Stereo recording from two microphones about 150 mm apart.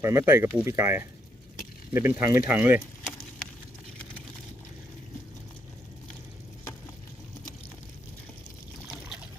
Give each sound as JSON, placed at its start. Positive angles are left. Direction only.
{"t": 0.0, "sound": "speech", "side_deg": -15}